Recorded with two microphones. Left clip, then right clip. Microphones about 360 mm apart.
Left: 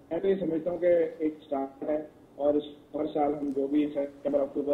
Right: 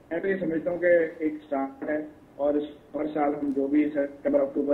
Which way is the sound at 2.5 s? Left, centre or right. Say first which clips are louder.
Right 1 dB; left.